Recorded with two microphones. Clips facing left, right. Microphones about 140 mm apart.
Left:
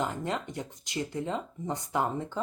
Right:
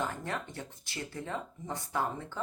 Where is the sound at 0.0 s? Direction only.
20° left (ahead or behind).